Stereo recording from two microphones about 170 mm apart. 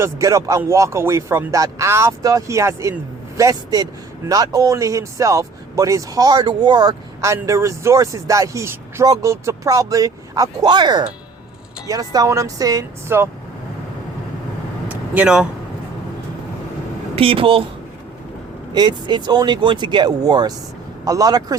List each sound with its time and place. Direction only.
0.0 s speech: 20° right (ahead or behind)
14.8 s vehicle: 10° right (ahead or behind)
17.2 s speech: 30° right (ahead or behind)
18.7 s speech: 25° right (ahead or behind)